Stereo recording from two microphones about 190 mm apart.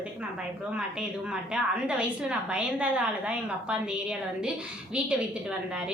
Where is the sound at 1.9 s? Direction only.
5° right (ahead or behind).